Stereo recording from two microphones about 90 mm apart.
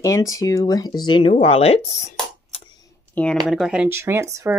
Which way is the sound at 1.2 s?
90° left.